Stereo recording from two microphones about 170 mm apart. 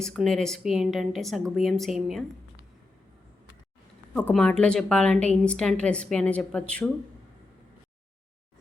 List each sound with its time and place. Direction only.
0.0 s a woman's voice: centre (ahead or behind)
4.1 s a woman's voice: 5° left (ahead or behind)